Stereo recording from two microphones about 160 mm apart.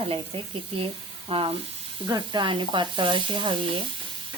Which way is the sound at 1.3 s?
35° right (ahead or behind).